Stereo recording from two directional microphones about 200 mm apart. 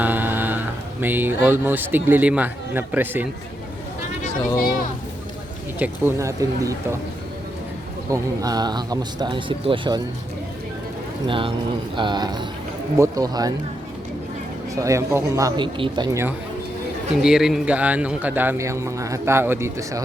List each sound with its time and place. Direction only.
0.0 s a sound: 10° right (ahead or behind)
1.0 s a man's voice: 10° right (ahead or behind)
4.5 s a sound: 45° left (ahead or behind)
5.8 s a man's voice: 15° right (ahead or behind)
8.1 s speech: 20° right (ahead or behind)
11.3 s speech: 25° right (ahead or behind)
14.8 s a man's voice: 15° right (ahead or behind)
17.2 s a man's voice: centre (ahead or behind)